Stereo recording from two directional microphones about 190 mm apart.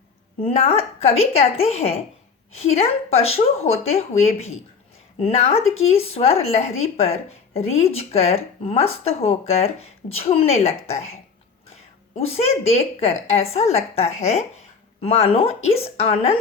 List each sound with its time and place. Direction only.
0.3 s speech: 30° left (ahead or behind)
12.1 s speech: 30° left (ahead or behind)